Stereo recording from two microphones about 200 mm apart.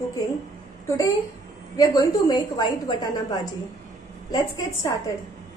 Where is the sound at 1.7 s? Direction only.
20° left (ahead or behind).